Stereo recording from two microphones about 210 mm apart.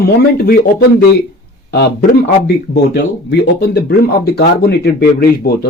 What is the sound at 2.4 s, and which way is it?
Speech, 50° left (ahead or behind).